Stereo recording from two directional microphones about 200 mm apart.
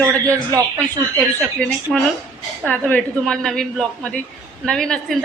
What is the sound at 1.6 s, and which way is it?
A woman's voice, 5° left (ahead or behind).